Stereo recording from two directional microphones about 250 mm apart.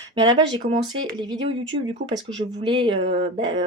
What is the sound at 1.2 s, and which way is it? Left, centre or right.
Speech, centre.